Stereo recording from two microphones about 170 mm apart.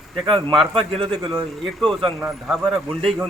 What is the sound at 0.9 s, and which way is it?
Speech, 30° right (ahead or behind).